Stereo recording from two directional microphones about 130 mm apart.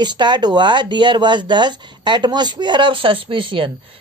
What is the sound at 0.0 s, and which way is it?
Speech, 35° right (ahead or behind).